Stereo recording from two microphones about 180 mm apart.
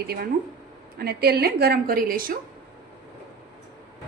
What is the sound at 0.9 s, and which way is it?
A woman's voice, 60° right (ahead or behind).